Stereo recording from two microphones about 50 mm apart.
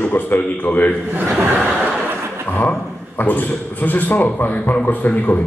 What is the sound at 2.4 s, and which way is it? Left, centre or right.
A man's voice, left.